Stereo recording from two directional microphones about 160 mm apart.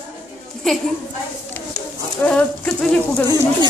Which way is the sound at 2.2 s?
5° left (ahead or behind).